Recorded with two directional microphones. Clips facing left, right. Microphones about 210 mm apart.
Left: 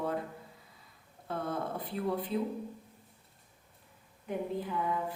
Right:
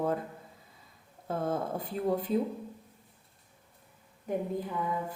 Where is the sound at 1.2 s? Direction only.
45° right (ahead or behind).